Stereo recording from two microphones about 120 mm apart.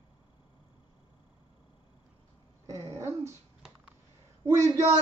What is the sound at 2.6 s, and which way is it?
Dog, 25° right (ahead or behind).